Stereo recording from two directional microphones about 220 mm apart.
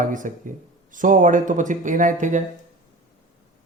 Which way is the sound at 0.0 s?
35° right (ahead or behind).